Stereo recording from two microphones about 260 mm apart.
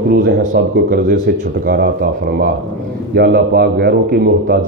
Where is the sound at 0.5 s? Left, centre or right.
Right.